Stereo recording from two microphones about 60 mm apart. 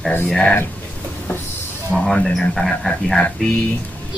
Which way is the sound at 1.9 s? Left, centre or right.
Centre.